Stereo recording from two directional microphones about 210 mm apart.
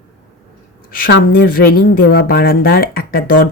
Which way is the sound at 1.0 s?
45° left (ahead or behind).